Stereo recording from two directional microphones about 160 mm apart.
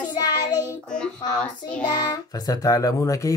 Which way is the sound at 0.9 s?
5° left (ahead or behind).